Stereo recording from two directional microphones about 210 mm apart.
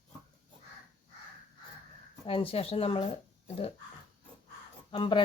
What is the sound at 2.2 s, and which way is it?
Speech, 25° left (ahead or behind).